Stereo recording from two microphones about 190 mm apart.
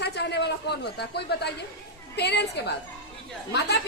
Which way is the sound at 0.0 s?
60° left (ahead or behind).